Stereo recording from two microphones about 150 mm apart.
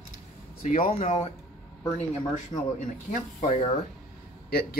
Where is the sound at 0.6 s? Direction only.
40° left (ahead or behind).